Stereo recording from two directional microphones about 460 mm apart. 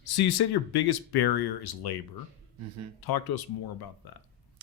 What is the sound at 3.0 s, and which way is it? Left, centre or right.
Speech, left.